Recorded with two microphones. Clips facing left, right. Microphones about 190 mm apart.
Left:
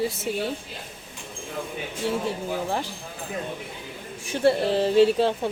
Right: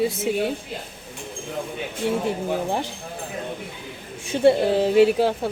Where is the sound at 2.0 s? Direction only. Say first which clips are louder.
Right 3 dB; 20° right (ahead or behind).